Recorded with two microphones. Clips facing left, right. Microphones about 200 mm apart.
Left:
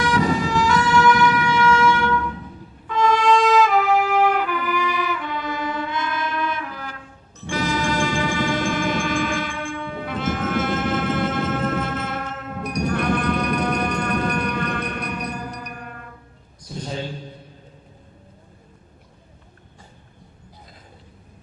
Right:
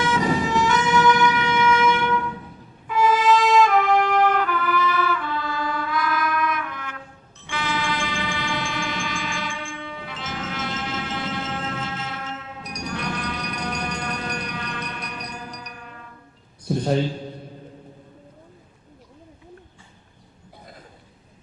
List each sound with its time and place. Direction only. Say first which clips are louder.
0.0 s siren: left 1 dB; 20° right (ahead or behind)
2.8 s trumpet: even; 10° right (ahead or behind); by 6.9 s 35° left (ahead or behind)
7.4 s music: left 4 dB; 40° left (ahead or behind); by 16.0 s 55° left (ahead or behind)
16.6 s a sound: right 9 dB; 60° right (ahead or behind)